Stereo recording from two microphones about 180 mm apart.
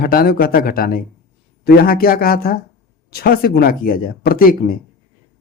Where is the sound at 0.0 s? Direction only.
55° left (ahead or behind).